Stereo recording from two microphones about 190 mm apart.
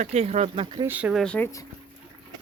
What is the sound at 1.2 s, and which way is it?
Speech, 5° left (ahead or behind).